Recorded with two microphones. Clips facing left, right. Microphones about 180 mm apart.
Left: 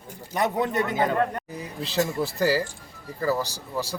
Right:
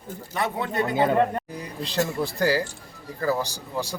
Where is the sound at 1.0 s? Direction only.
20° right (ahead or behind).